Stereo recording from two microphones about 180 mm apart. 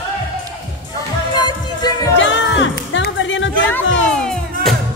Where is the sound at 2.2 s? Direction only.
90° left.